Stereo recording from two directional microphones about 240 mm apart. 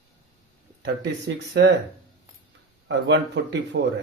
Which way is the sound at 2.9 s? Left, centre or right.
Right.